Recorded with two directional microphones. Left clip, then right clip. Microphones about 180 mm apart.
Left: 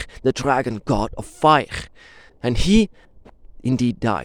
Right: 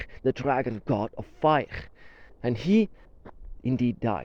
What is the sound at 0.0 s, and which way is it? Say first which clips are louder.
Speech: left 6 dB; 45° left (ahead or behind).